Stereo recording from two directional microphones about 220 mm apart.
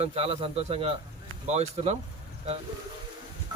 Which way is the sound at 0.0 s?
25° right (ahead or behind).